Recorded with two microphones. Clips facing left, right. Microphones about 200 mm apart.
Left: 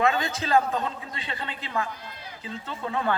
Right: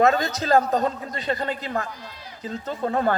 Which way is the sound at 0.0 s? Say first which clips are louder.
Right 5 dB; 40° right (ahead or behind).